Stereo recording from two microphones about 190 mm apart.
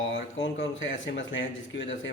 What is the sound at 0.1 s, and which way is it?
A man's voice, 80° left.